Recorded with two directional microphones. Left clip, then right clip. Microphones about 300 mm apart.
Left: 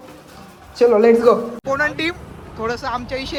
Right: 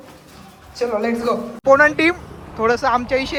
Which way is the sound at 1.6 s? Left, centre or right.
Centre.